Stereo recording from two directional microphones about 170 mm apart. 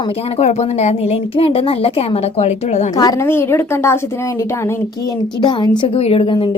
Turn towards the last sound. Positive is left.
turn(degrees=30)  # may be behind; listen again after turning